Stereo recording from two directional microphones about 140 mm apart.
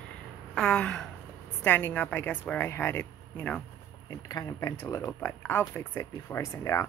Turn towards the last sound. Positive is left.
turn(degrees=20)  # may be behind; listen again after turning